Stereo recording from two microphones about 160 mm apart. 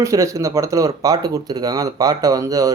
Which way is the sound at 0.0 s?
20° right (ahead or behind).